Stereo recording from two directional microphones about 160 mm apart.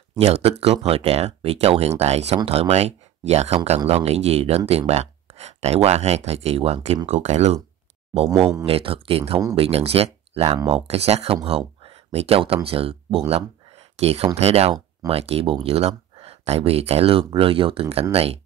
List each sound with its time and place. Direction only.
0.2 s speech: 40° right (ahead or behind)
8.6 s speech: 35° right (ahead or behind)